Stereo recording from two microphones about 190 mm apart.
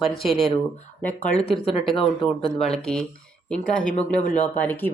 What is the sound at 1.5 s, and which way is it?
Speech, 30° left (ahead or behind).